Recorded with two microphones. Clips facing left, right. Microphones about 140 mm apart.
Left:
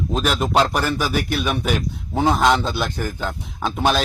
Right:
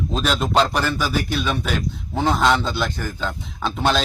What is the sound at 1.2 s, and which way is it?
Speech, 65° left (ahead or behind).